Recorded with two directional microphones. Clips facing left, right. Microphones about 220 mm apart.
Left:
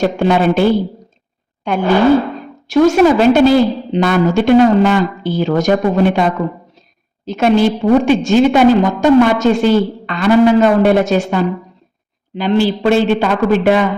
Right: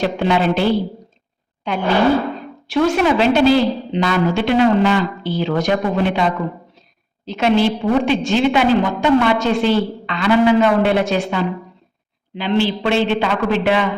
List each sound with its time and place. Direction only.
0.0 s a woman's voice: 45° left (ahead or behind)